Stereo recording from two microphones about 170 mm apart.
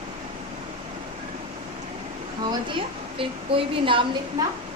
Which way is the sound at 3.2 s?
30° right (ahead or behind).